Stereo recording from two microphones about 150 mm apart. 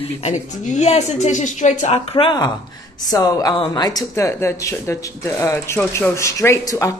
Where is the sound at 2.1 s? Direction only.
30° left (ahead or behind).